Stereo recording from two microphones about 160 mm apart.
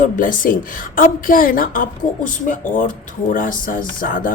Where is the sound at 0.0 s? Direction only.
60° left (ahead or behind).